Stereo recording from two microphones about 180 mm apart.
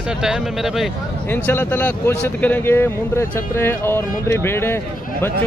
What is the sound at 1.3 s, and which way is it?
A man's voice, 10° left (ahead or behind).